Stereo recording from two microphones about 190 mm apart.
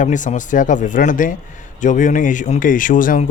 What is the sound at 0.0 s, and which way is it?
Speech, 40° left (ahead or behind).